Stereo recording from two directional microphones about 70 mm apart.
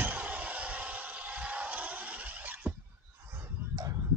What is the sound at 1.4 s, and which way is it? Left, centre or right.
Crowd, centre.